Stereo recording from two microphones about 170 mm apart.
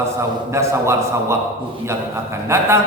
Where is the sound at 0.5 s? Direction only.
15° right (ahead or behind).